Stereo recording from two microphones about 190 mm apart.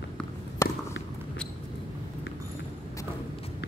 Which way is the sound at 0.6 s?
15° left (ahead or behind).